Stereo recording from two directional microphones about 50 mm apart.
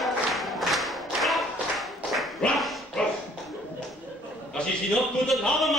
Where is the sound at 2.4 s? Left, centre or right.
Centre.